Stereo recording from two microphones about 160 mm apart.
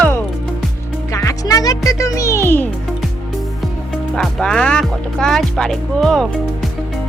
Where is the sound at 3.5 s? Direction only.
Centre (ahead or behind).